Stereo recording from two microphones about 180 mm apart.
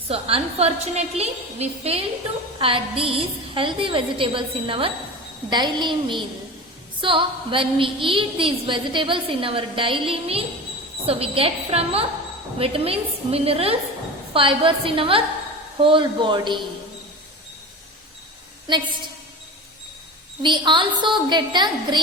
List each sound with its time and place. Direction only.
0.1 s a woman's voice: 30° right (ahead or behind)
20.4 s a woman's voice: 25° right (ahead or behind)